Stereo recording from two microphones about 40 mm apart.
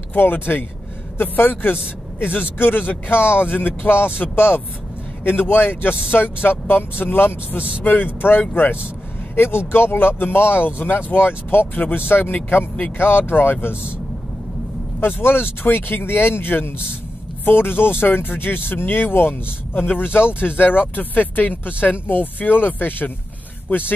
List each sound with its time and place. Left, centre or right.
0.1 s speech: left
5.2 s speech: left
7.8 s speech: left
9.3 s speech: left
12.5 s speech: left
15.0 s speech: left
20.9 s speech: left